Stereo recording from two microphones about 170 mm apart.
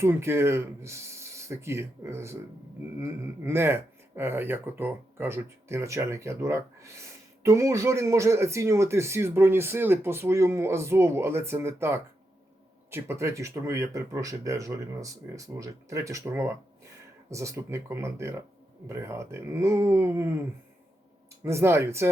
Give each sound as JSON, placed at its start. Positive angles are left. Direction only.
{"t": 0.0, "sound": "speech", "side_deg": -15}
{"t": 21.4, "sound": "speech", "side_deg": -15}